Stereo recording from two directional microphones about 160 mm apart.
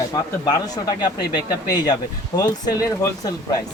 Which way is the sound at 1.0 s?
25° left (ahead or behind).